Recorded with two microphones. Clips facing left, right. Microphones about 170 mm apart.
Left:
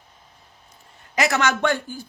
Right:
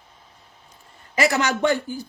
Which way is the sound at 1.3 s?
65° left (ahead or behind).